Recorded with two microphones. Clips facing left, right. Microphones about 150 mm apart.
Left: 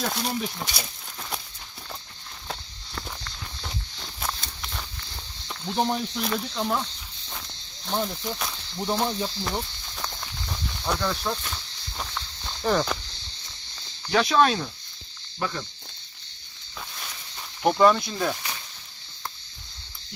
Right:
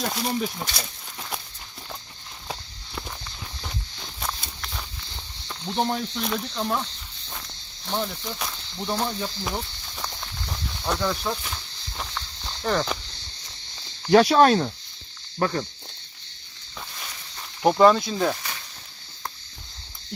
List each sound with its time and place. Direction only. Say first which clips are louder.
0.0 s speech: right 2 dB; centre (ahead or behind)
2.5 s walk: right 1 dB; 5° right (ahead or behind)
7.9 s speech: left 1 dB; 5° left (ahead or behind)
9.6 s snake: left 1 dB; centre (ahead or behind)
14.1 s speech: right 5 dB; 35° right (ahead or behind)
17.6 s speech: right 2 dB; 15° right (ahead or behind)